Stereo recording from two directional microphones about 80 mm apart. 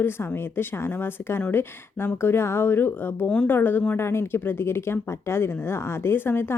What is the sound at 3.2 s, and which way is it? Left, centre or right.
Speech, centre.